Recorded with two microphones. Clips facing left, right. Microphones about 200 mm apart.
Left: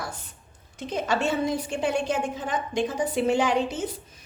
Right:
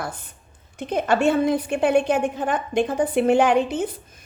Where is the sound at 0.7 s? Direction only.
55° right (ahead or behind).